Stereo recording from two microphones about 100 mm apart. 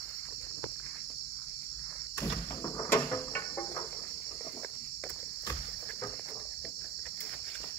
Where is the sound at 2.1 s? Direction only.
35° left (ahead or behind).